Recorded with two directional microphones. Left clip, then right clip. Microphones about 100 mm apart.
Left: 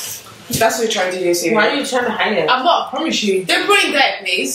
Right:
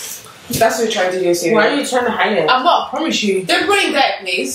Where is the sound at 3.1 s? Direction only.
Centre (ahead or behind).